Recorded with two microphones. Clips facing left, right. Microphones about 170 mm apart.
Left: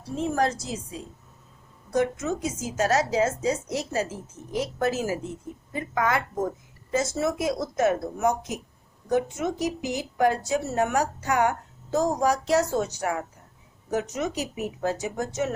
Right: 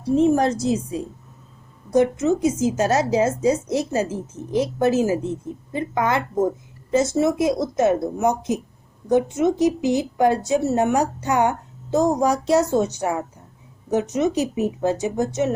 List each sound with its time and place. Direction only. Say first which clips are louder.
0.2 s a woman's voice: right 6 dB; 20° right (ahead or behind)
1.9 s a woman's voice: right 7 dB; 25° right (ahead or behind)